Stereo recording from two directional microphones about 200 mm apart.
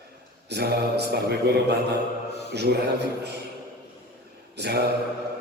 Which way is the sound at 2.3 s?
55° left (ahead or behind).